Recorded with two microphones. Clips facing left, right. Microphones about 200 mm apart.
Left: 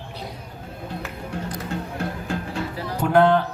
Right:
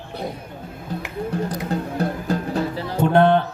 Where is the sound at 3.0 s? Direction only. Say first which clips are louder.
Right 1 dB; 25° right (ahead or behind).